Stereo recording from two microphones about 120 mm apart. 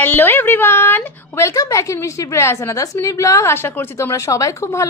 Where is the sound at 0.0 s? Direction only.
15° left (ahead or behind).